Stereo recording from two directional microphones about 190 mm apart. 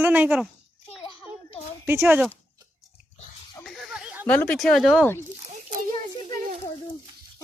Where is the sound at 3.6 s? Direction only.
Centre (ahead or behind).